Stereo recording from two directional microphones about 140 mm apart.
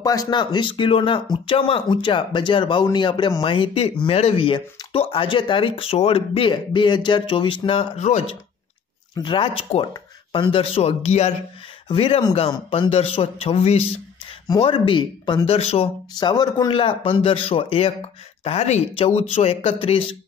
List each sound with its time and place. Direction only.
0.0 s speech: 25° left (ahead or behind); by 8.4 s 50° left (ahead or behind)
9.1 s speech: 35° left (ahead or behind)
12.4 s speech: 30° left (ahead or behind)
12.9 s speech: 45° left (ahead or behind)
14.6 s speech: 35° left (ahead or behind)
16.2 s speech: 30° left (ahead or behind)